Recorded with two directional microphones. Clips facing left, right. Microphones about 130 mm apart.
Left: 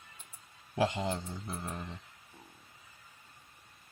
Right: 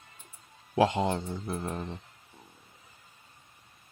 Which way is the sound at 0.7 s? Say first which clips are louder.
Right 6 dB; 55° right (ahead or behind).